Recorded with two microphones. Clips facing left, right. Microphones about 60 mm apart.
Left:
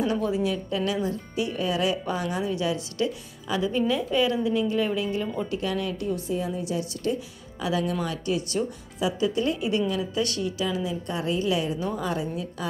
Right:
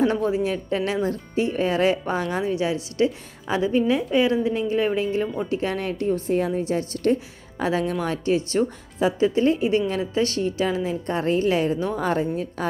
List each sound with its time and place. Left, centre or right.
0.0 s speech: right
2.5 s a woman's voice: right
6.6 s a woman's voice: right